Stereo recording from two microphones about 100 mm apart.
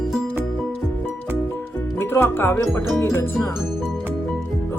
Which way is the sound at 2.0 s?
25° left (ahead or behind).